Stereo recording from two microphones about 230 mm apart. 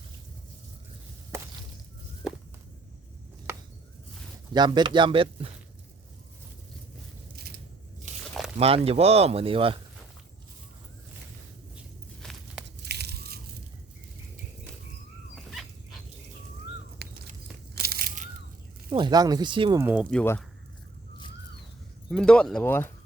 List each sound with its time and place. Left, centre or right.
4.5 s speech: centre
8.5 s speech: right
12.2 s a sound: centre
12.8 s a sound: right
15.4 s dog: centre
17.0 s a sound: right
18.9 s speech: centre
19.8 s speech: centre
20.1 s speech: centre
22.1 s speech: centre